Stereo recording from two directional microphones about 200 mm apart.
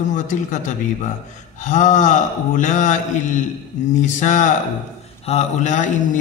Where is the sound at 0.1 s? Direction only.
40° left (ahead or behind).